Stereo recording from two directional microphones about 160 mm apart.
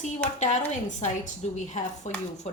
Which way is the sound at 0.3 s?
50° left (ahead or behind).